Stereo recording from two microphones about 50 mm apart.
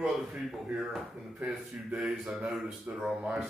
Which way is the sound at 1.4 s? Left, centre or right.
Right.